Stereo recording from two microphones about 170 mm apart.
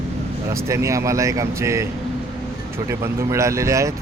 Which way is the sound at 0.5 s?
15° right (ahead or behind).